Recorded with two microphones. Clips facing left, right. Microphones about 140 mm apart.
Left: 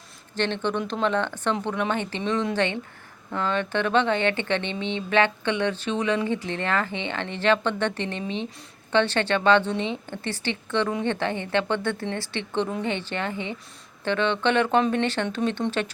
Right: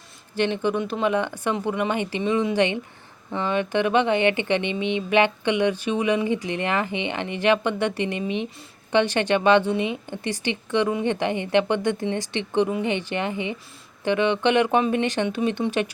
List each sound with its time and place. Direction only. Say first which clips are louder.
0.3 s speech: right 3 dB; 10° right (ahead or behind)